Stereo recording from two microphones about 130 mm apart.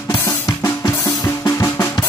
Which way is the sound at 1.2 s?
25° left (ahead or behind).